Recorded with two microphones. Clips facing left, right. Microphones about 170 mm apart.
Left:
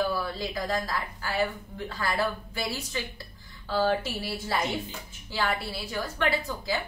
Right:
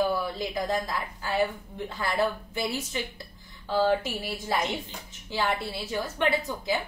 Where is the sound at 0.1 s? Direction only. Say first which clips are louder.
Right 2 dB; 20° right (ahead or behind).